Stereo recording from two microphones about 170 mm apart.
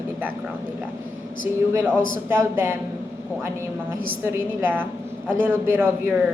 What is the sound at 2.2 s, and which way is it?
Speech, 15° right (ahead or behind).